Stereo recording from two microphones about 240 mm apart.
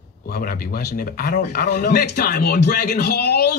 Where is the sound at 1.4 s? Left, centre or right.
Left.